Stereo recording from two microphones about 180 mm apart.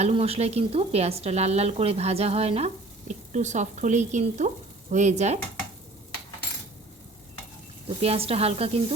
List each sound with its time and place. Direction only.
0.0 s a woman's voice: 35° right (ahead or behind)
7.9 s a woman's voice: 35° right (ahead or behind)